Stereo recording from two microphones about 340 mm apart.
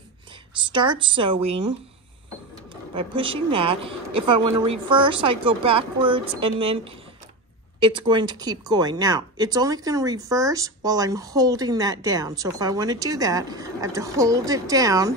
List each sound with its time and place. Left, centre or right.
0.6 s a woman's voice: centre